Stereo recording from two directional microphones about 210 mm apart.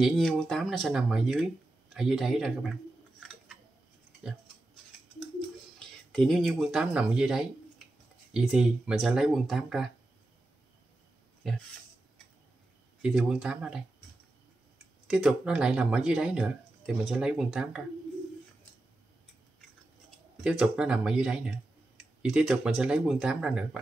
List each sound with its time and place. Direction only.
0.0 s speech: centre (ahead or behind)
3.2 s scissors: centre (ahead or behind)
5.8 s speech: centre (ahead or behind)
11.4 s speech: centre (ahead or behind)
13.0 s speech: 5° right (ahead or behind)
15.0 s speech: 5° right (ahead or behind)
20.4 s speech: 5° right (ahead or behind)